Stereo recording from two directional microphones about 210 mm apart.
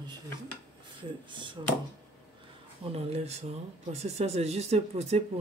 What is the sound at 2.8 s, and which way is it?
Speech, 30° right (ahead or behind).